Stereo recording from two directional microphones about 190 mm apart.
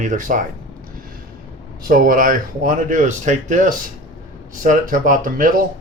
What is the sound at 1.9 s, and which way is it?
Speech, 50° right (ahead or behind).